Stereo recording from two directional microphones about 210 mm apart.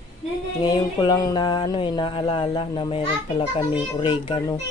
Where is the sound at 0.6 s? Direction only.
20° left (ahead or behind).